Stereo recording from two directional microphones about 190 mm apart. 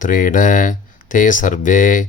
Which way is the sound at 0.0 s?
45° left (ahead or behind).